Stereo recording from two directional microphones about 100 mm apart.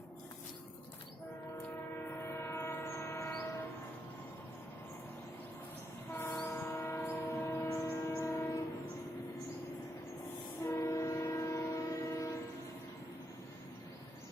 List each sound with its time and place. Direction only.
2.0 s train: 25° left (ahead or behind)
6.1 s train: 20° left (ahead or behind)
10.6 s train: 25° left (ahead or behind)